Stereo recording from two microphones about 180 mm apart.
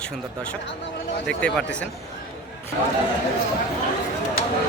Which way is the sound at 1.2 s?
5° left (ahead or behind).